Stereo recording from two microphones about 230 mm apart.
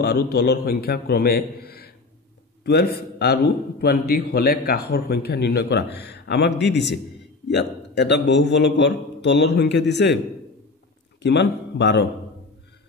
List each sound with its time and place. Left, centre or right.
0.0 s a man's voice: left
11.2 s a man's voice: left